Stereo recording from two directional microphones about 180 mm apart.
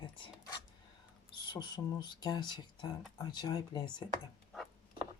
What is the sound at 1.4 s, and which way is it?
Speech, 25° left (ahead or behind).